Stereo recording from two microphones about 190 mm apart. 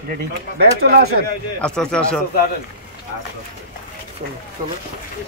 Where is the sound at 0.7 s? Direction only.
50° right (ahead or behind).